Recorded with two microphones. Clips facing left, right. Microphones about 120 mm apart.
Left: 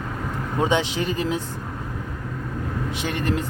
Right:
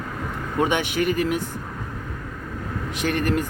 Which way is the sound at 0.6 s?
20° left (ahead or behind).